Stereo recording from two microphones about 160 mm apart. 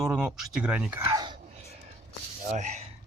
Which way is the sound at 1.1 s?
25° right (ahead or behind).